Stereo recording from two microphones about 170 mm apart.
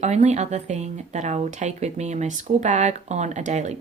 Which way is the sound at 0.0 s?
40° right (ahead or behind).